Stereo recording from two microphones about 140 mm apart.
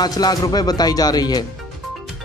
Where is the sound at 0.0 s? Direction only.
30° left (ahead or behind).